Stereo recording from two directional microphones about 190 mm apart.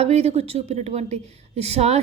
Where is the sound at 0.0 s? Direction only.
35° right (ahead or behind).